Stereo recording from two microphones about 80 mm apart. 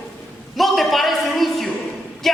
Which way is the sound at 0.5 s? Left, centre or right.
Centre.